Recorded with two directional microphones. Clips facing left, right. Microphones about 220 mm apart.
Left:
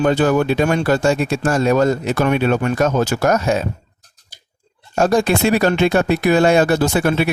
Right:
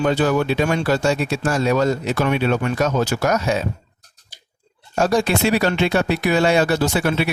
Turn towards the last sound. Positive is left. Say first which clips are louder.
# left 3 dB
turn(degrees=50)  # may be behind; listen again after turning